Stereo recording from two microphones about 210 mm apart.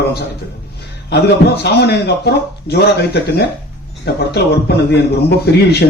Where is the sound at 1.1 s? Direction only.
50° left (ahead or behind).